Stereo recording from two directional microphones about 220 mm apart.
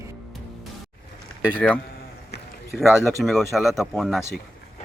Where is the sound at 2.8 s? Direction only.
Centre (ahead or behind).